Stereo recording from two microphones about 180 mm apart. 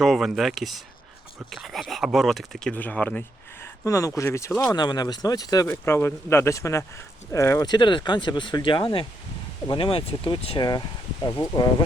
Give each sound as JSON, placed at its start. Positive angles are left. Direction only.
{"t": 0.0, "sound": "speech", "side_deg": 0}